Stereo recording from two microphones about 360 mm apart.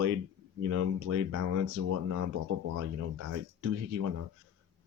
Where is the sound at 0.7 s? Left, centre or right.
Right.